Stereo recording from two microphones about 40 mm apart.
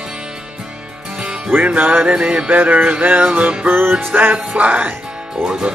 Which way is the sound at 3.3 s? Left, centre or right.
Right.